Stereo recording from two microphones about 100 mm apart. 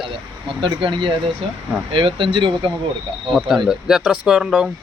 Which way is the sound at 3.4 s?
Centre (ahead or behind).